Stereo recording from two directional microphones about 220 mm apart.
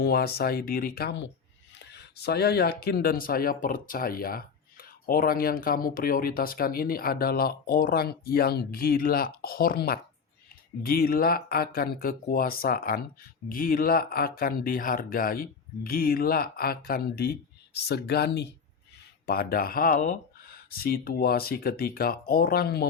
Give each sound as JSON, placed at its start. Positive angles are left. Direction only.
{"t": 0.0, "sound": "speech", "side_deg": 45}